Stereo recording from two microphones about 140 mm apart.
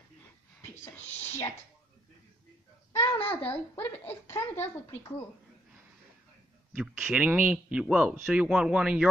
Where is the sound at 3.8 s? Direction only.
15° left (ahead or behind).